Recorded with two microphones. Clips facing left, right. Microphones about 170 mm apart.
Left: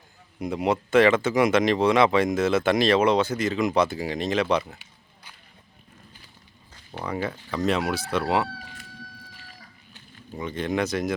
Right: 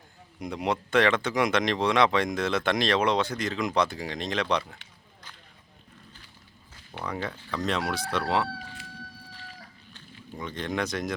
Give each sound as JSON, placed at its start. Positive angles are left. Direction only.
{"t": 0.3, "sound": "speech", "side_deg": 5}
{"t": 7.0, "sound": "speech", "side_deg": 5}
{"t": 9.9, "sound": "speech", "side_deg": 5}